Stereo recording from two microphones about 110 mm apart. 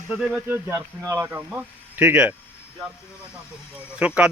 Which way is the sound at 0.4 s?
15° right (ahead or behind).